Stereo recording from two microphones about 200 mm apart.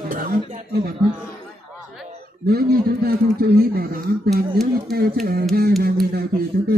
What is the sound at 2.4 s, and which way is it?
A man's voice, 50° right (ahead or behind).